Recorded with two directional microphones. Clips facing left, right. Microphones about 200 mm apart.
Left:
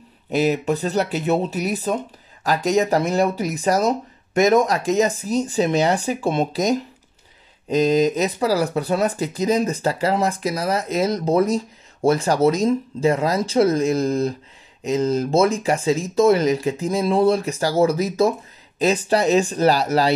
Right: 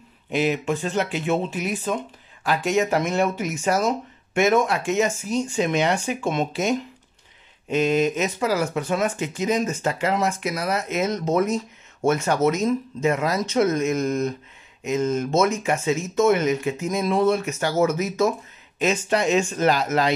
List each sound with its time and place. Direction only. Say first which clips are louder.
0.3 s speech: left 3 dB; 40° left (ahead or behind)